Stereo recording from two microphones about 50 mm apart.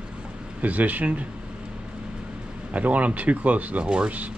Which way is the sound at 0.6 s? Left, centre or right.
Right.